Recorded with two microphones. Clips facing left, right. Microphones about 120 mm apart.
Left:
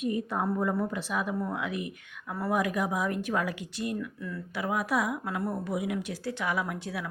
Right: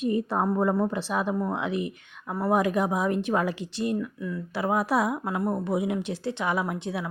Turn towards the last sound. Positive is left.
turn(degrees=-25)  # may be behind; listen again after turning